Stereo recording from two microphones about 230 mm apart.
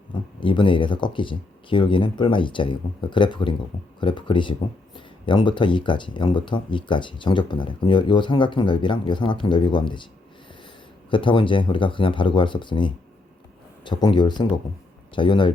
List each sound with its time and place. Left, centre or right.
0.1 s speech: left
11.1 s speech: left